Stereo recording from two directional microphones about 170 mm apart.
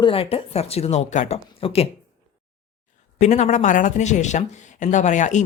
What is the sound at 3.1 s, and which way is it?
Speech, 45° left (ahead or behind).